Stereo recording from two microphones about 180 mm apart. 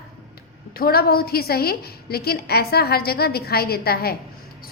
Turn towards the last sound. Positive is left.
turn(degrees=60)  # may be behind; listen again after turning